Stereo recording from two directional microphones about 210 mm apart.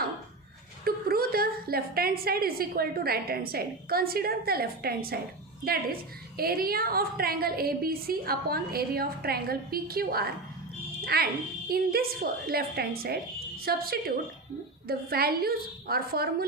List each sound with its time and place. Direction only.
0.9 s a woman's voice: 45° right (ahead or behind)